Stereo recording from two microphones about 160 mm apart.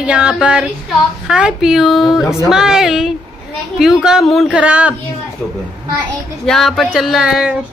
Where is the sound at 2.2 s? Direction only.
20° left (ahead or behind).